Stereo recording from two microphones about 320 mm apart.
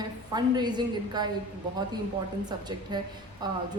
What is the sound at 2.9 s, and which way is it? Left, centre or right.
Speech, centre.